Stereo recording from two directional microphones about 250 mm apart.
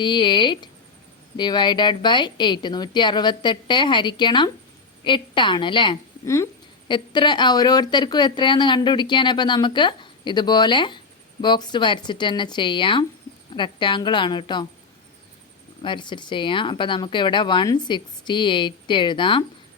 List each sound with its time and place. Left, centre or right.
0.0 s a woman's voice: centre
15.8 s speech: centre